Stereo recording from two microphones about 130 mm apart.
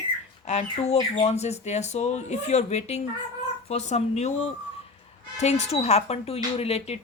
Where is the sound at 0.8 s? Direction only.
55° left (ahead or behind).